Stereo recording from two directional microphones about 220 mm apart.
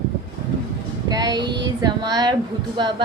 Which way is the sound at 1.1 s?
20° right (ahead or behind).